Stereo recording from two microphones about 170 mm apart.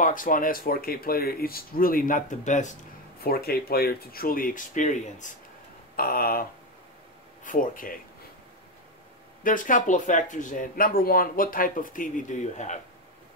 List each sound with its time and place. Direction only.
0.0 s speech: 50° left (ahead or behind)
3.2 s speech: 65° left (ahead or behind); by 5.4 s 45° left (ahead or behind)
5.9 s speech: 60° left (ahead or behind)
7.4 s speech: 50° left (ahead or behind)
9.4 s speech: 50° left (ahead or behind)